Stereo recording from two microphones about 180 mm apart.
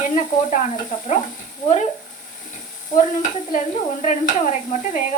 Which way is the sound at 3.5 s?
45° left (ahead or behind).